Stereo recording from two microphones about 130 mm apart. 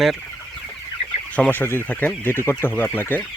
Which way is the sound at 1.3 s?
15° left (ahead or behind).